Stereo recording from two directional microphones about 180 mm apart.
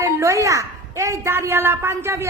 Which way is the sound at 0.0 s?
15° right (ahead or behind).